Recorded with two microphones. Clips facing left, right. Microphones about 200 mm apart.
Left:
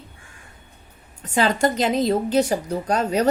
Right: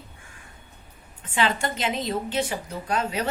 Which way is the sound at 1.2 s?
40° left (ahead or behind).